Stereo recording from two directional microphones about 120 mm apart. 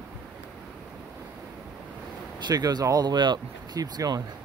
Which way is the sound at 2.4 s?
35° right (ahead or behind).